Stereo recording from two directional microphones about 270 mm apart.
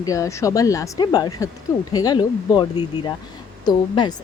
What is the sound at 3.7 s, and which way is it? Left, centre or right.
Speech, centre.